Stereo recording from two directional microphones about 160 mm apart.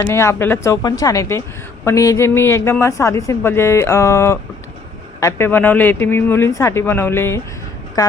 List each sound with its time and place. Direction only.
0.0 s speech: 15° left (ahead or behind)